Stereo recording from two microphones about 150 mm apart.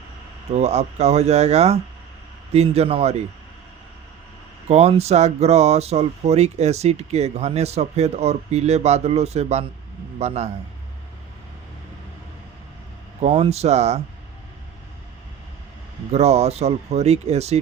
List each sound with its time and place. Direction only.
0.5 s speech: 45° right (ahead or behind)
4.7 s speech: 45° right (ahead or behind)
13.2 s speech: 40° right (ahead or behind)
16.1 s speech: 45° right (ahead or behind)